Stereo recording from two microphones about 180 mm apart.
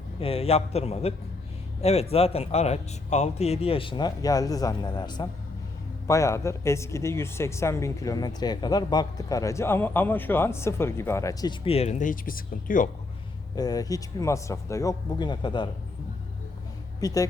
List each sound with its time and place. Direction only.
0.2 s speech: 30° left (ahead or behind); by 12.9 s 50° left (ahead or behind)
13.6 s speech: 20° left (ahead or behind)
17.0 s speech: 20° left (ahead or behind)